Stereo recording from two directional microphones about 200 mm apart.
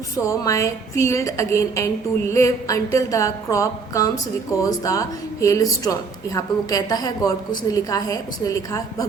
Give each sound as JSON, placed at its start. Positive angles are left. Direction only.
{"t": 0.3, "sound": "a woman's voice", "side_deg": 15}